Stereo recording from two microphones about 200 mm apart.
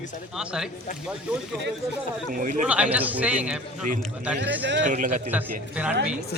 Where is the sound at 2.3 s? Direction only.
40° right (ahead or behind).